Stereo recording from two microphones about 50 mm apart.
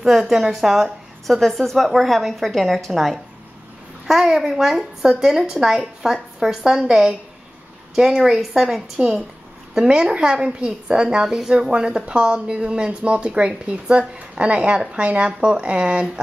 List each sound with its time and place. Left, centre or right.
0.0 s a woman's voice: centre
8.2 s speech: centre
9.8 s a woman's voice: centre